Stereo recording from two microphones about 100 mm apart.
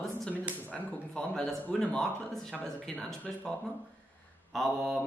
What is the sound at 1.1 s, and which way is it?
Speech, 10° left (ahead or behind).